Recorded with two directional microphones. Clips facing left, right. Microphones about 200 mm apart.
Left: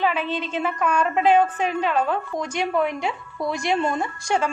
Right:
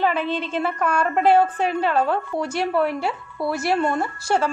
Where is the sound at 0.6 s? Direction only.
10° left (ahead or behind).